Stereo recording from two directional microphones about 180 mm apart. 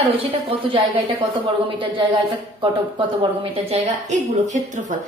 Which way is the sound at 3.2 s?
35° right (ahead or behind).